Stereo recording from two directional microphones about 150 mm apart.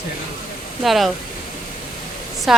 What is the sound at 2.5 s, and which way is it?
Speech, centre (ahead or behind).